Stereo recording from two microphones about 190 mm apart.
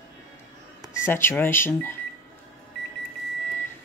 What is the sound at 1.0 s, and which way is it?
Speech, 10° left (ahead or behind).